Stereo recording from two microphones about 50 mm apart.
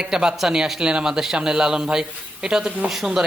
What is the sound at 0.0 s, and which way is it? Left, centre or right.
Speech, centre.